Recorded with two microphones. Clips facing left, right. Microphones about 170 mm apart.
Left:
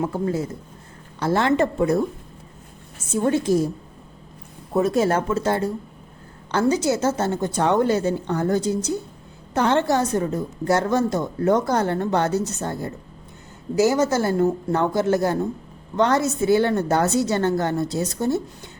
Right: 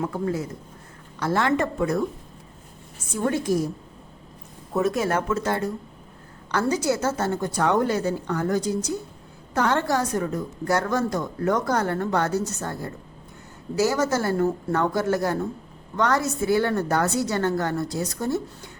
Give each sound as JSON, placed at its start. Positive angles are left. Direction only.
{"t": 0.0, "sound": "a woman's voice", "side_deg": 25}
{"t": 3.1, "sound": "a woman's voice", "side_deg": 25}
{"t": 4.7, "sound": "a woman's voice", "side_deg": 30}